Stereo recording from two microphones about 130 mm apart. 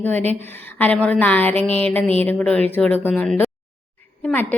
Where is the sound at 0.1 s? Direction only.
60° right (ahead or behind).